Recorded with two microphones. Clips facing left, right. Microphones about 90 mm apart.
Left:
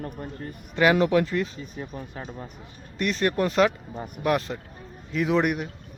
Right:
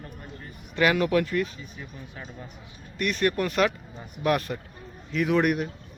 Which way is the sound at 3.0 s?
25° left (ahead or behind).